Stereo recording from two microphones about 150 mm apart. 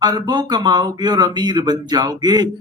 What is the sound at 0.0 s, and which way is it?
Speech, 30° right (ahead or behind).